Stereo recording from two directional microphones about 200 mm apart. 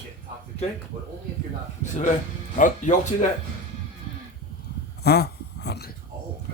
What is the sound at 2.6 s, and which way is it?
Speech, 40° left (ahead or behind).